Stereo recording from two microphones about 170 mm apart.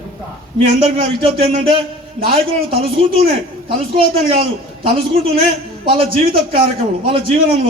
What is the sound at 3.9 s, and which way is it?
A woman's voice, 30° right (ahead or behind).